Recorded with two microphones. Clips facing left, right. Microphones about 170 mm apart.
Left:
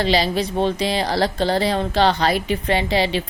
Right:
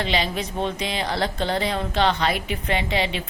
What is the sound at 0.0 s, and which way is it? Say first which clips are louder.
A woman's voice: left 6 dB; 35° left (ahead or behind).